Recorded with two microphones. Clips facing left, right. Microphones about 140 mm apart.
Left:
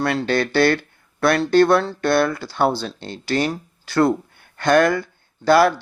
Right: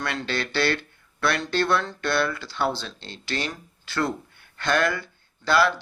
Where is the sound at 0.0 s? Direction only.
40° left (ahead or behind).